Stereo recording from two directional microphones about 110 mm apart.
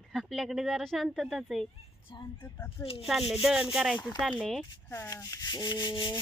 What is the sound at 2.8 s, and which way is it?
Speech, 20° left (ahead or behind).